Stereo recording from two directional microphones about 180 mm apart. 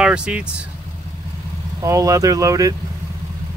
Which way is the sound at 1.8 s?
15° right (ahead or behind).